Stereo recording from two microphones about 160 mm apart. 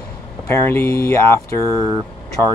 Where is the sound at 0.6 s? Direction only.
15° left (ahead or behind).